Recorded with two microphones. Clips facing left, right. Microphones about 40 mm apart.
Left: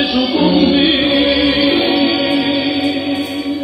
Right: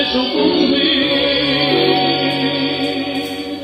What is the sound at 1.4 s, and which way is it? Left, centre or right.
Music, left.